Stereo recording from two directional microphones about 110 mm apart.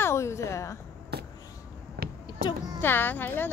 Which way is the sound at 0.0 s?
25° left (ahead or behind).